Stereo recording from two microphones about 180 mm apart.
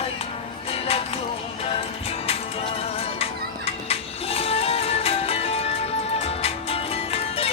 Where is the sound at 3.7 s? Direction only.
35° left (ahead or behind).